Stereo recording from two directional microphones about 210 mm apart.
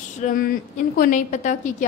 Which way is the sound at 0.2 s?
35° left (ahead or behind).